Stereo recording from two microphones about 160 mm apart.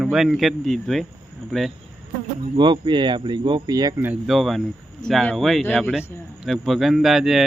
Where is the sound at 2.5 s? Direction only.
30° right (ahead or behind).